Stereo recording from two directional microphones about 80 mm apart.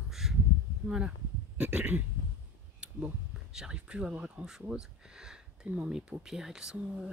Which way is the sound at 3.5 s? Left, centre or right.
Centre.